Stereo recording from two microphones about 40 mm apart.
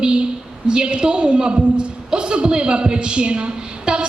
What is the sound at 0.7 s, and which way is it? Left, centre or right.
A woman's voice, right.